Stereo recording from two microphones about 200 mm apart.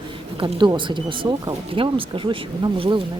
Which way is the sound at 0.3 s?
25° right (ahead or behind).